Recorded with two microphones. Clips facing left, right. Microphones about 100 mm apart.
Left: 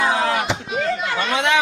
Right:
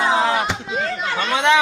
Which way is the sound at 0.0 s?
25° right (ahead or behind).